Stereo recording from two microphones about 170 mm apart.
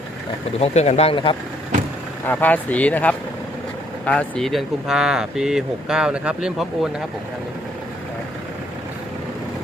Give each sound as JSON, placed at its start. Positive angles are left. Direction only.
{"t": 0.6, "sound": "speech", "side_deg": 40}
{"t": 2.2, "sound": "speech", "side_deg": 10}